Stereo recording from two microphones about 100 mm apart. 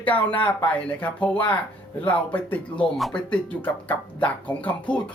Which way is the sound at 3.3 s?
15° left (ahead or behind).